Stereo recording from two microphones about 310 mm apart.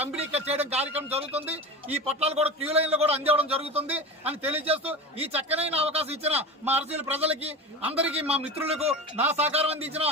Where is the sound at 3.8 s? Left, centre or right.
Centre.